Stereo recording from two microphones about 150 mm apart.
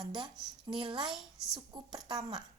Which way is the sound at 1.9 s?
30° right (ahead or behind).